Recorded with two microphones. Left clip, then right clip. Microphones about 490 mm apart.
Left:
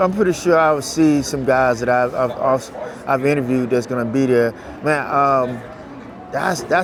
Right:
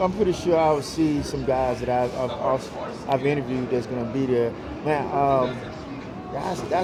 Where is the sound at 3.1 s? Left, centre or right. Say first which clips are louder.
Left 6 dB; left.